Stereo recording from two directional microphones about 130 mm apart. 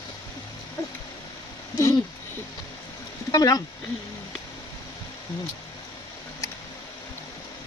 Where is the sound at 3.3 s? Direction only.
30° left (ahead or behind).